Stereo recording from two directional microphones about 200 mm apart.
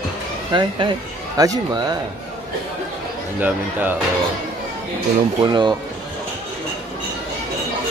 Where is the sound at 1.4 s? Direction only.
20° right (ahead or behind).